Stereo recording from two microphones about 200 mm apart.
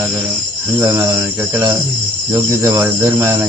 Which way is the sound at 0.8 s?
15° right (ahead or behind).